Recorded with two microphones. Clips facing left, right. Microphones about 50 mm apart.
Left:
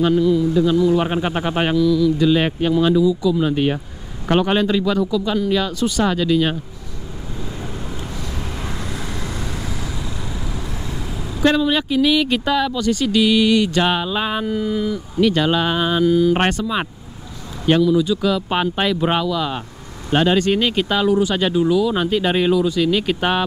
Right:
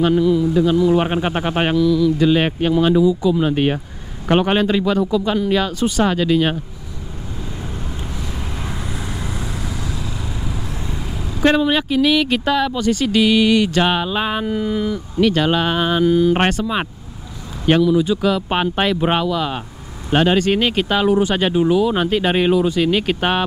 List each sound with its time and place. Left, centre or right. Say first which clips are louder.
0.0 s speech: right 1 dB; centre
2.1 s speech: right 1 dB; right
8.5 s vehicle: even; centre
11.4 s speech: right 1 dB; right
12.0 s speech: even; centre
12.7 s speech: right 1 dB; right
17.6 s speech: right 1 dB; centre